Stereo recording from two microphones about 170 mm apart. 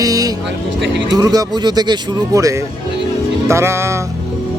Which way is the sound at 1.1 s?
20° right (ahead or behind).